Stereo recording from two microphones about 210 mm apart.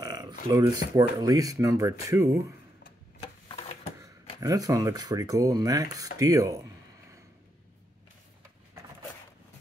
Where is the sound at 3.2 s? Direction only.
30° left (ahead or behind).